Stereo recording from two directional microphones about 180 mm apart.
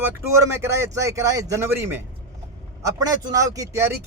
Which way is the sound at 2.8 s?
20° right (ahead or behind).